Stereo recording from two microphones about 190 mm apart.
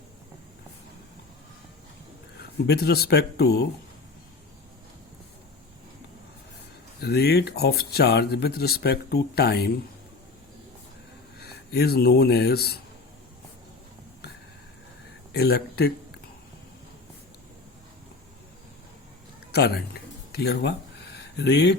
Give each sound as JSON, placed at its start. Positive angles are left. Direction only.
{"t": 2.4, "sound": "speech", "side_deg": 55}
{"t": 7.0, "sound": "speech", "side_deg": 60}
{"t": 11.3, "sound": "speech", "side_deg": 55}
{"t": 15.3, "sound": "speech", "side_deg": 55}
{"t": 19.5, "sound": "speech", "side_deg": 60}